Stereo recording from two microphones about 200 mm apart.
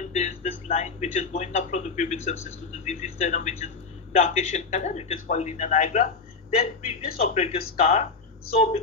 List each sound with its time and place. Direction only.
0.0 s speech: 35° left (ahead or behind)